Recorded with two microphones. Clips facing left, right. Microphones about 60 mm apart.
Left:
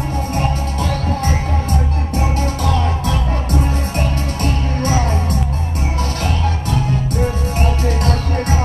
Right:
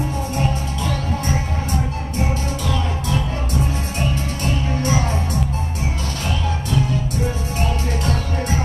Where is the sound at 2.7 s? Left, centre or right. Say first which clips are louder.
Left 3 dB; left.